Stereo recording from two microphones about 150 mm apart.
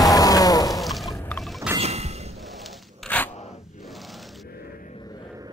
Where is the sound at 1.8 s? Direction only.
45° right (ahead or behind).